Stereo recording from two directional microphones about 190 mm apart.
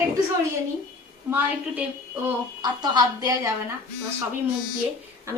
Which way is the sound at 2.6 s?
20° right (ahead or behind).